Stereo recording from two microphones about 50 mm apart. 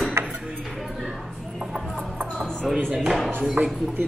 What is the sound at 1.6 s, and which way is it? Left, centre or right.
Clip-clop, centre.